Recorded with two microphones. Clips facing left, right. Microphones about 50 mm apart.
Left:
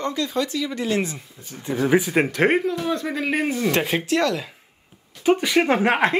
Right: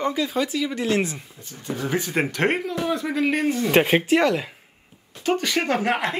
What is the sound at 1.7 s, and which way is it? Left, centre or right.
Speech, centre.